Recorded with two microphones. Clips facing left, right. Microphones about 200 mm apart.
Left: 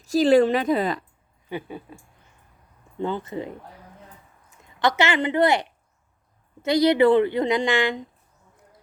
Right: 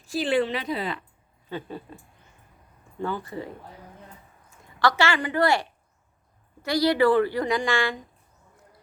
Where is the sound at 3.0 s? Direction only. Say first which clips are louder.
Left 3 dB; 20° left (ahead or behind).